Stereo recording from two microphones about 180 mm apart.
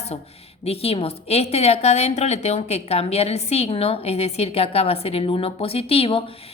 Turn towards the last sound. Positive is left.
turn(degrees=30)  # may be behind; listen again after turning